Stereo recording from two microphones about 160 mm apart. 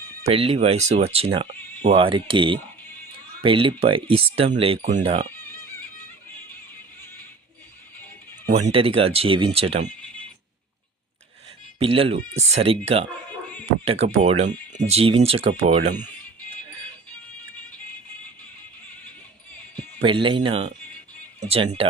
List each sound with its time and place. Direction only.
0.3 s speech: 40° right (ahead or behind)
8.5 s speech: 40° right (ahead or behind)
11.8 s speech: 35° right (ahead or behind)
19.7 s speech: 30° right (ahead or behind)